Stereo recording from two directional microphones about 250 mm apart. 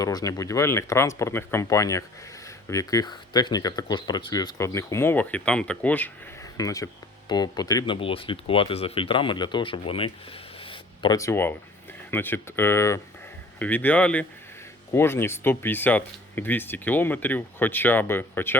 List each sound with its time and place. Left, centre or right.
0.0 s speech: centre
10.6 s a sound: centre
12.1 s speech: centre